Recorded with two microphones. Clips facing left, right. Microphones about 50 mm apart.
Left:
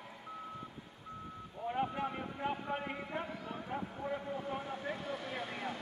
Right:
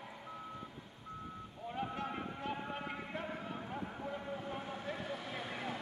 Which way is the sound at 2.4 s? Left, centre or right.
Centre.